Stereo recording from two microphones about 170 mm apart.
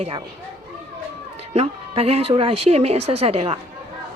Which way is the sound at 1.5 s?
35° right (ahead or behind).